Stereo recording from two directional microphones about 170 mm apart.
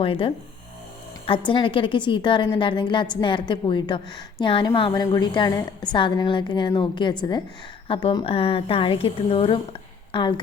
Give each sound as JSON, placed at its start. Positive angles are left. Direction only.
{"t": 0.0, "sound": "a woman's voice", "side_deg": 30}